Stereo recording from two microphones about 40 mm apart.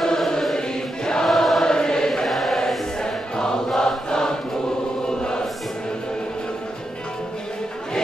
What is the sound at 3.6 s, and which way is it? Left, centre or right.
Chant, centre.